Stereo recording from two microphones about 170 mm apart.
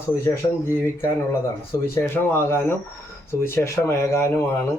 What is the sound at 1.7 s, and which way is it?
Speech, 15° left (ahead or behind).